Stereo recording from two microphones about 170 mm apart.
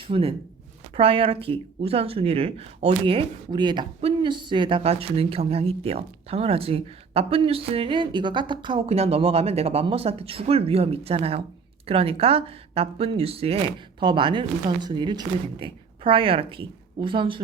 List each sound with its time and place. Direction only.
0.1 s speech: 35° right (ahead or behind)